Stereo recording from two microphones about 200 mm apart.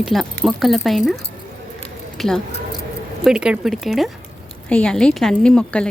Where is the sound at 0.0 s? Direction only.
Centre (ahead or behind).